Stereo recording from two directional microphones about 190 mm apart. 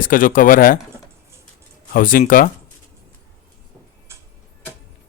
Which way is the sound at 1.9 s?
45° left (ahead or behind).